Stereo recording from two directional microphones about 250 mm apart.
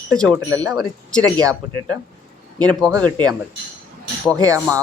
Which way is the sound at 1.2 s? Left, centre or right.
Centre.